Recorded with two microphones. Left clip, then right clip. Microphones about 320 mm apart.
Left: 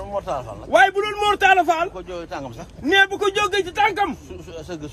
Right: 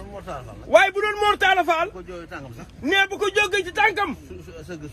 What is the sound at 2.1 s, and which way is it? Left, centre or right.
Speech, left.